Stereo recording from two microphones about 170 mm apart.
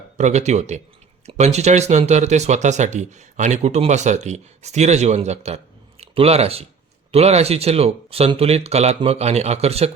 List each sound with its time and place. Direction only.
0.2 s speech: 45° right (ahead or behind)